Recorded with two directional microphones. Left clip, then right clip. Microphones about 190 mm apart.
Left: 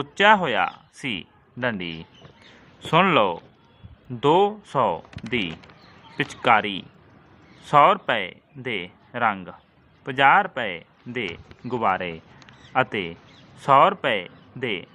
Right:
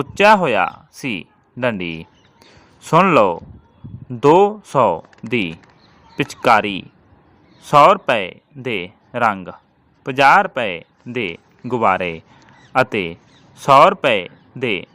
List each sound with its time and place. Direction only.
0.0 s speech: 35° right (ahead or behind)
2.9 s speech: 35° right (ahead or behind)